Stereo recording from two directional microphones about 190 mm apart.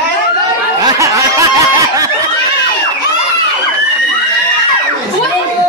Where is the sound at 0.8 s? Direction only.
15° right (ahead or behind).